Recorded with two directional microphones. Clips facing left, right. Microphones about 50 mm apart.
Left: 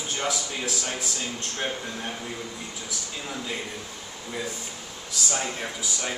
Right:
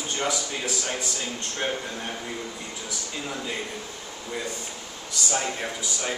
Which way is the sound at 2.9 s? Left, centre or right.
Centre.